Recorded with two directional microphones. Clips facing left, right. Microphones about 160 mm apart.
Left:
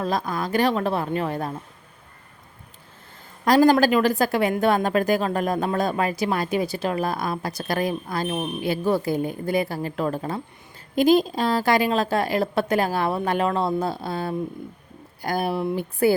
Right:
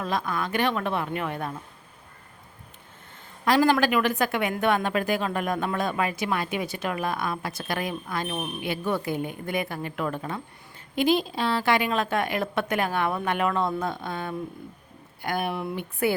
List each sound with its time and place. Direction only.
0.0 s speech: 35° left (ahead or behind)
3.4 s speech: 40° left (ahead or behind)